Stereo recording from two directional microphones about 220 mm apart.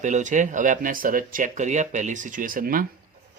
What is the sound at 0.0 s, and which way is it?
Speech, 35° right (ahead or behind).